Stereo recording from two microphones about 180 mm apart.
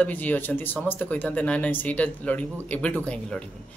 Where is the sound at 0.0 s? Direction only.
10° left (ahead or behind).